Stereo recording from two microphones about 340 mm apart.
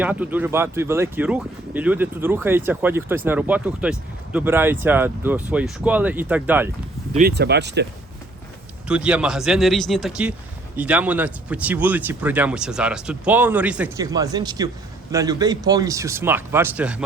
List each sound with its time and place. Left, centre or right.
0.0 s speech: centre
7.1 s speech: right
8.9 s speech: centre